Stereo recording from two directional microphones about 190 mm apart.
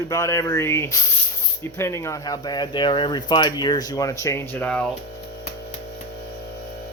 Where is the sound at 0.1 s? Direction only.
15° left (ahead or behind).